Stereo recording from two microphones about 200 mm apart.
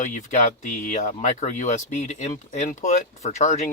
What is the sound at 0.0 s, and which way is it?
Speech, 40° left (ahead or behind).